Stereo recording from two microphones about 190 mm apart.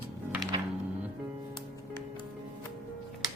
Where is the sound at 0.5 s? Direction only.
25° right (ahead or behind).